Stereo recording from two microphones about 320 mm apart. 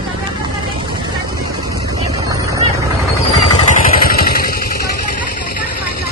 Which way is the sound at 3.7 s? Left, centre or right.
Left.